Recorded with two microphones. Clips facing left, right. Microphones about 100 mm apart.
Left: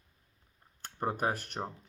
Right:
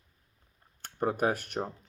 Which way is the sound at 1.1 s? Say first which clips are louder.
Right 4 dB; 35° left (ahead or behind).